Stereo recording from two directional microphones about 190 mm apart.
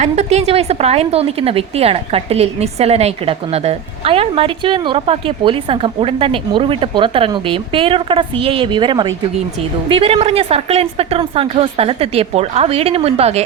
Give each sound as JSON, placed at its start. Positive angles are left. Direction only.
{"t": 0.0, "sound": "a woman's voice", "side_deg": -35}